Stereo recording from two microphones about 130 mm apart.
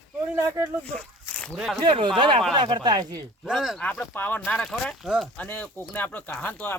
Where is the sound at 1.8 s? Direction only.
40° right (ahead or behind).